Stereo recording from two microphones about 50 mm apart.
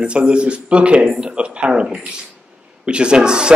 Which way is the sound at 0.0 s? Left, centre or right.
Right.